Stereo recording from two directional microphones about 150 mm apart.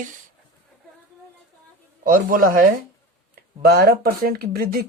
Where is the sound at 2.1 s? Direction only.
65° right (ahead or behind).